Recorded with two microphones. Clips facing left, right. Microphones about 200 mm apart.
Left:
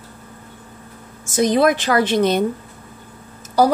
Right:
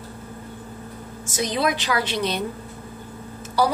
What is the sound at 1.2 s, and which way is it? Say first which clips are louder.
Speech: left 8 dB; 50° left (ahead or behind).